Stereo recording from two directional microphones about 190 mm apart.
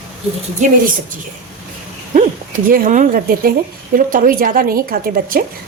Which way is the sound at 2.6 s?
45° right (ahead or behind).